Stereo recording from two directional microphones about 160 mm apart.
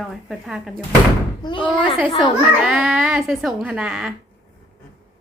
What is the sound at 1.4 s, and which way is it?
Speech, 25° left (ahead or behind).